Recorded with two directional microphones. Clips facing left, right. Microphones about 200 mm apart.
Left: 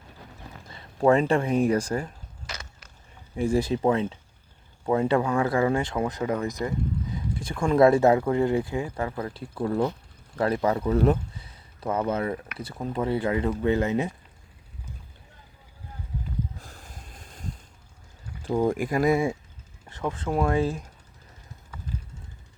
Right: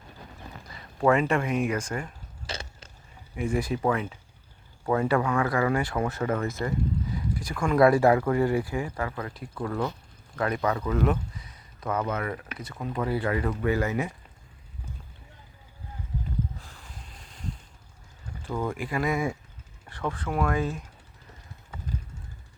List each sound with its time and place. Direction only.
0.7 s speech: 30° left (ahead or behind)
2.5 s a sound: 30° right (ahead or behind)
3.3 s speech: 30° left (ahead or behind)
7.3 s speech: 25° left (ahead or behind)
16.6 s a sound: 45° left (ahead or behind)
18.6 s speech: 40° left (ahead or behind)